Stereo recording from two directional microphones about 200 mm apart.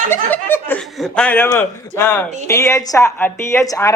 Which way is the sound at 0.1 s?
10° left (ahead or behind).